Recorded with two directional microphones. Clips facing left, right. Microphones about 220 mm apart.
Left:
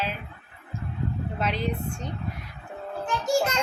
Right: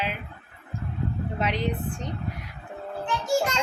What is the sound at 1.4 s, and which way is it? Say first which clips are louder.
Speech: right 1 dB; 15° right (ahead or behind).